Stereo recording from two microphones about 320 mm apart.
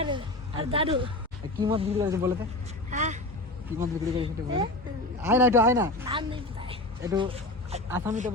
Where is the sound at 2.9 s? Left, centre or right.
Right.